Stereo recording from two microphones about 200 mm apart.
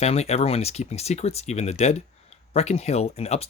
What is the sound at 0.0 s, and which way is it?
Speech, 30° left (ahead or behind).